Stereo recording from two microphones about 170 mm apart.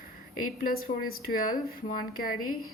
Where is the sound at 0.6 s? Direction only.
60° left (ahead or behind).